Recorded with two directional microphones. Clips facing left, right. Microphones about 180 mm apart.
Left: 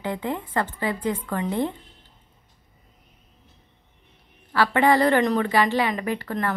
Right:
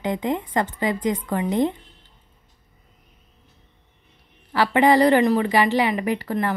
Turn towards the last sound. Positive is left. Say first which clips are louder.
# right 3 dB
turn(degrees=-15)  # may be behind; listen again after turning